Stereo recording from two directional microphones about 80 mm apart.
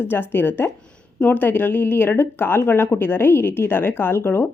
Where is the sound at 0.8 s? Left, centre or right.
Centre.